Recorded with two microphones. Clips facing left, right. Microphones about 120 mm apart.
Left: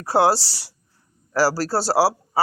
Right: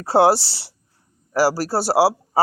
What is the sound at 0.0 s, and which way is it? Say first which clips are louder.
Speech: right 3 dB; 25° right (ahead or behind).